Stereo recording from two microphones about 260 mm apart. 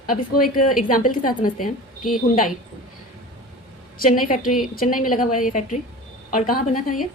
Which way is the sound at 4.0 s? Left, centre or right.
Left.